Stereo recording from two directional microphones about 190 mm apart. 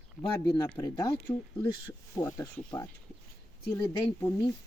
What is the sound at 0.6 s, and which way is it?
Speech, 15° left (ahead or behind).